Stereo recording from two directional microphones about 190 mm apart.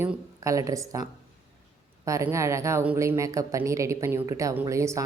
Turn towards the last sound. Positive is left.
turn(degrees=-15)  # may be behind; listen again after turning